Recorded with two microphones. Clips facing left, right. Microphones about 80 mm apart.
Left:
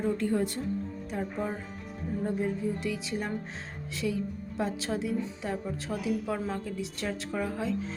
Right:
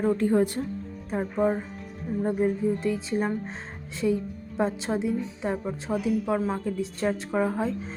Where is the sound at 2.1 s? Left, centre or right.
Centre.